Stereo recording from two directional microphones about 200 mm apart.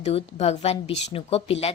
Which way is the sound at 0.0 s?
30° left (ahead or behind).